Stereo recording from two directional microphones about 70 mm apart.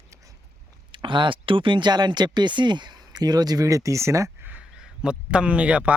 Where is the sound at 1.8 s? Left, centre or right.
Right.